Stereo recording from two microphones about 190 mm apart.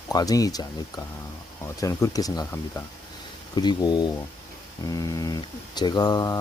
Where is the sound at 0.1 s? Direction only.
20° left (ahead or behind).